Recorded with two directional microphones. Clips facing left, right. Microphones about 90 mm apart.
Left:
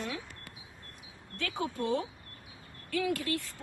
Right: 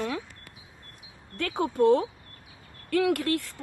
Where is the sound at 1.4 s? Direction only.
55° right (ahead or behind).